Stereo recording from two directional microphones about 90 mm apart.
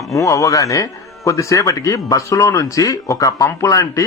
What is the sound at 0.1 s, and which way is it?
Speech, 35° left (ahead or behind).